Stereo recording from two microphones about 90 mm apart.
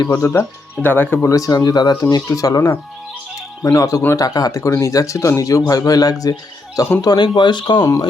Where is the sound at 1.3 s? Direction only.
40° left (ahead or behind).